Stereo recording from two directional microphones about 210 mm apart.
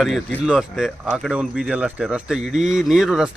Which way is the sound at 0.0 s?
5° right (ahead or behind).